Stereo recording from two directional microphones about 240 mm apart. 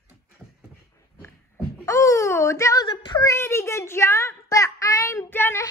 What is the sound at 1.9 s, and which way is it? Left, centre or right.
A child's voice, centre.